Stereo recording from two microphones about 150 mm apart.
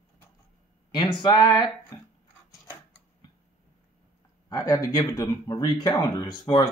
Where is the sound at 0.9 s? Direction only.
30° left (ahead or behind).